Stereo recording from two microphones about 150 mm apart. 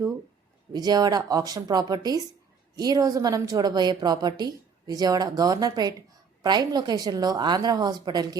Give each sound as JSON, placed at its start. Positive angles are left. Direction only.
{"t": 0.7, "sound": "a woman's voice", "side_deg": -25}